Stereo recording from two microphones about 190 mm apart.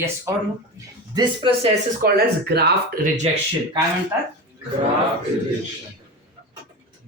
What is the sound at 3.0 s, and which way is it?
Speech, 40° right (ahead or behind).